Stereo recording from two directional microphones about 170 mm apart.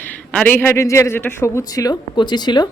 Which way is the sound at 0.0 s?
10° left (ahead or behind).